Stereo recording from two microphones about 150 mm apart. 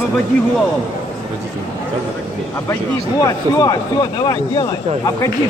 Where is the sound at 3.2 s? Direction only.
25° left (ahead or behind).